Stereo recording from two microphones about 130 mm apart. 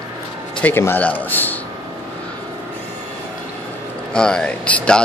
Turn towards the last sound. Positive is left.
turn(degrees=10)  # may be behind; listen again after turning